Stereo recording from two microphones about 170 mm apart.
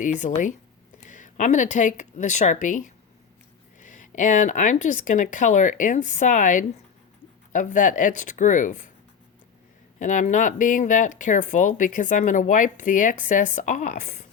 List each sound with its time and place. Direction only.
0.0 s speech: 50° left (ahead or behind)
10.0 s speech: 50° left (ahead or behind)